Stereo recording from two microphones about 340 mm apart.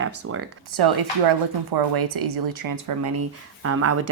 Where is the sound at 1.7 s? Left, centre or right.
Right.